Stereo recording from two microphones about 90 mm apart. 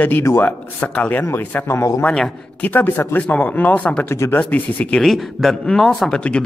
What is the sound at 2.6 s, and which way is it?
A man's voice, 20° left (ahead or behind).